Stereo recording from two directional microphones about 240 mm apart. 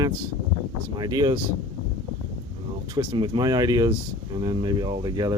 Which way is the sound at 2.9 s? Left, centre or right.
Centre.